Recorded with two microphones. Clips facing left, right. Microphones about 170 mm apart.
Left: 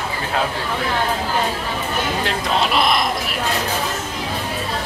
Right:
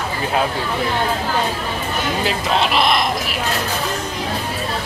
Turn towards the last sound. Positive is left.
turn(degrees=0)  # may be behind; listen again after turning